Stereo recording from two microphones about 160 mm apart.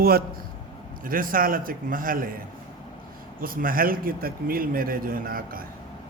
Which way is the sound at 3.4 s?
60° right (ahead or behind).